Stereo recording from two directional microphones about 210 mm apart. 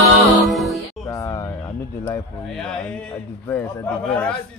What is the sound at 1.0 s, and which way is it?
Music, 15° left (ahead or behind).